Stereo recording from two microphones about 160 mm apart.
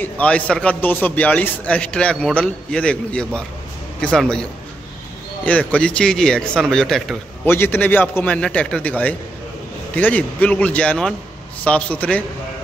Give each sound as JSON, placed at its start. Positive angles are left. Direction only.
{"t": 0.0, "sound": "a man's voice", "side_deg": 10}
{"t": 7.4, "sound": "a man's voice", "side_deg": 15}